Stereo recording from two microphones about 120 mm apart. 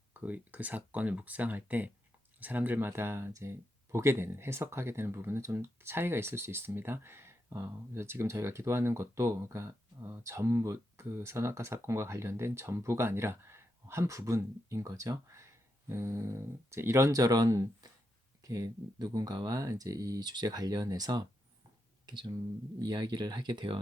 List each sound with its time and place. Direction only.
0.1 s speech: 15° right (ahead or behind); by 23.8 s 40° right (ahead or behind)